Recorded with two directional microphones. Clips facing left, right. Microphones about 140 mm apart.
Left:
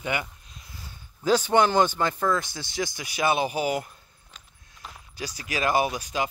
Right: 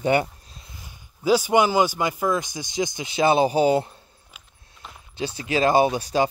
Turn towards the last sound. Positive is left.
turn(degrees=-35)  # may be behind; listen again after turning